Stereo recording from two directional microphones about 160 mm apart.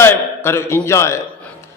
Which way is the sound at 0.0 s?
15° left (ahead or behind).